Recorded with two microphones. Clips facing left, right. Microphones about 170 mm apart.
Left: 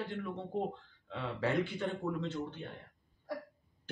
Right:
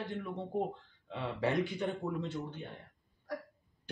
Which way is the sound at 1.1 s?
15° right (ahead or behind).